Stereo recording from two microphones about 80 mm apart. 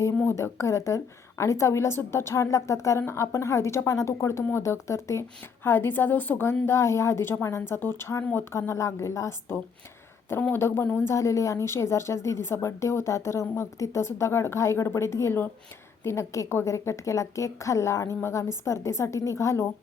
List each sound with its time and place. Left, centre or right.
0.3 s a woman's voice: left
8.2 s speech: left
8.5 s a woman's voice: left